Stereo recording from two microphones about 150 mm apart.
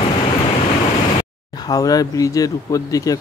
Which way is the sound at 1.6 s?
25° left (ahead or behind).